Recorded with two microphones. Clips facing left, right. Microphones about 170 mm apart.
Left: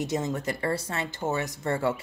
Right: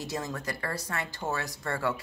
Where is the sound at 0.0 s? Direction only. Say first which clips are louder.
Left 6 dB; 20° left (ahead or behind).